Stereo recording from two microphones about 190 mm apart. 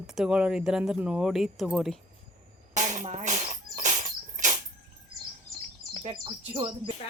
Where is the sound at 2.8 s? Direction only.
40° right (ahead or behind).